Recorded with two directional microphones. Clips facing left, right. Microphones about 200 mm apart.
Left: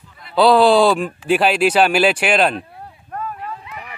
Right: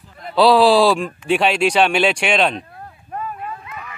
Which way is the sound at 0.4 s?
Centre (ahead or behind).